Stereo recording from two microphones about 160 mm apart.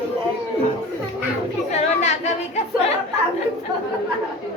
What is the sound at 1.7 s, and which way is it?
Yodeling, 45° left (ahead or behind).